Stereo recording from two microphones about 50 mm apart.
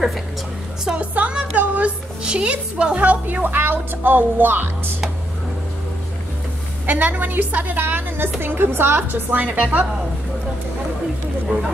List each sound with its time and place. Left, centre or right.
0.9 s music: right
2.2 s speech: centre
3.0 s speech: right
6.9 s speech: right